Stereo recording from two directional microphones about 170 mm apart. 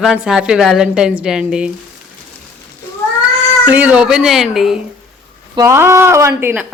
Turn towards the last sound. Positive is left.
turn(degrees=-10)  # may be behind; listen again after turning